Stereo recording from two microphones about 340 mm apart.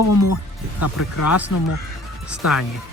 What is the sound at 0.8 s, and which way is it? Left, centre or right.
Speech, left.